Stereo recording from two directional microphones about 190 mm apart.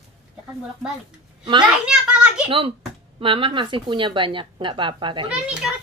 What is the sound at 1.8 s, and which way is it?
Speech, 5° right (ahead or behind).